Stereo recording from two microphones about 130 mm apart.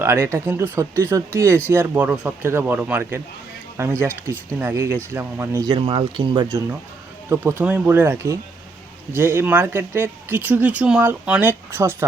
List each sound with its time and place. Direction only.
0.0 s speech: 20° right (ahead or behind)
5.6 s speech: 40° right (ahead or behind)
7.3 s speech: 15° right (ahead or behind)